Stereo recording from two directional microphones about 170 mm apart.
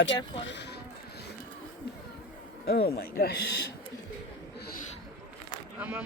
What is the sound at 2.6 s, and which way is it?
Speech, 65° left (ahead or behind).